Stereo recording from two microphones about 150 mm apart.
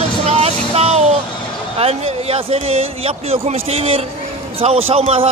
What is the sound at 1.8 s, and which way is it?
Speech, 40° right (ahead or behind).